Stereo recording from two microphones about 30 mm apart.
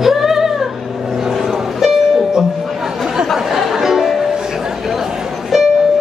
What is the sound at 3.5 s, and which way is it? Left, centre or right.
Music, centre.